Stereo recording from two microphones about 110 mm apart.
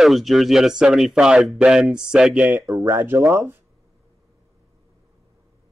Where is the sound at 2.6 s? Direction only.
25° right (ahead or behind).